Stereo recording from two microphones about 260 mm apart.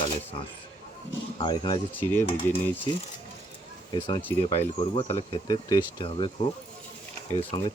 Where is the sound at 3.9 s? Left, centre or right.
Centre.